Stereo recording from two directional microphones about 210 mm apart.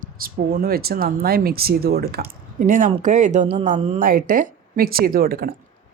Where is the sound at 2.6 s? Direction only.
35° right (ahead or behind).